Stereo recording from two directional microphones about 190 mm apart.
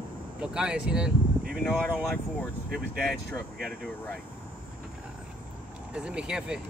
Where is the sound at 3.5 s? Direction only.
55° right (ahead or behind).